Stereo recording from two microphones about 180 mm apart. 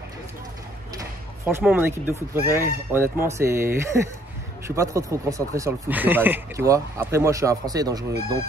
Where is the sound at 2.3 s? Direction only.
15° right (ahead or behind).